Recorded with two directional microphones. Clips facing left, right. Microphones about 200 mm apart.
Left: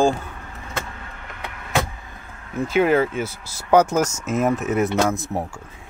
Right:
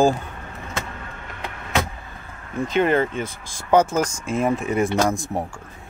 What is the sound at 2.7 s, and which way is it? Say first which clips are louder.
Speech: left 2 dB; 5° left (ahead or behind).